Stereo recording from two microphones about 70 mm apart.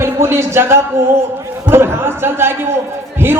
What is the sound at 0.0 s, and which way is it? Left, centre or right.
A man's voice, right.